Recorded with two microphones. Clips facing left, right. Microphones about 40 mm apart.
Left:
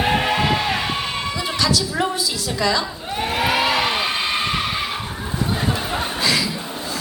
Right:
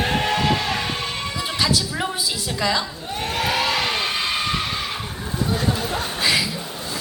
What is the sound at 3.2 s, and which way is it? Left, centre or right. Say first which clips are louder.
Crowd: left 3 dB; centre.